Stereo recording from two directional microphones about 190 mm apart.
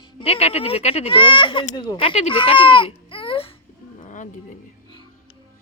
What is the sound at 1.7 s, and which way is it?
Speech, 20° left (ahead or behind).